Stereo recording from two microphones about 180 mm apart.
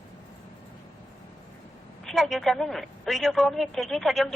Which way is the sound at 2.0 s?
Centre (ahead or behind).